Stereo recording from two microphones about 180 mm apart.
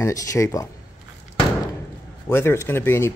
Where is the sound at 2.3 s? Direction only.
15° left (ahead or behind).